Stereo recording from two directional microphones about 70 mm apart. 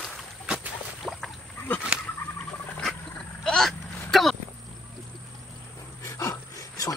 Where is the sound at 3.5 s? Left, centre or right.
Centre.